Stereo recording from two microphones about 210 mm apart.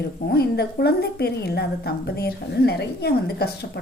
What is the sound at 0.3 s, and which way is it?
A woman's voice, 50° left (ahead or behind).